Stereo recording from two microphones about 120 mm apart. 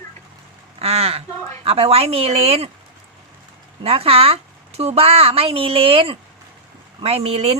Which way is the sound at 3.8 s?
55° right (ahead or behind).